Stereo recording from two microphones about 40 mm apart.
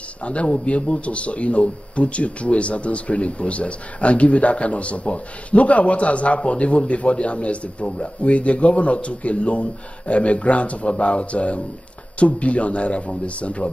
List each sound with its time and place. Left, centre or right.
0.2 s speech: left